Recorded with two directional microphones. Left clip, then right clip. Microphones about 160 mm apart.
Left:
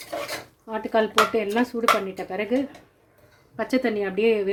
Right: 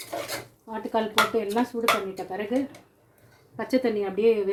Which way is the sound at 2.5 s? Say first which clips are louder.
Left 3 dB; 30° left (ahead or behind).